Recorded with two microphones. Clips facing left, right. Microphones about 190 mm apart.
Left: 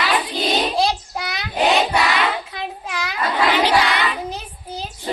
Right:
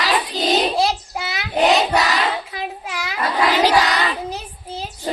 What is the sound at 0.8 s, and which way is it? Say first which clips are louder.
Child singing: even; 5° right (ahead or behind).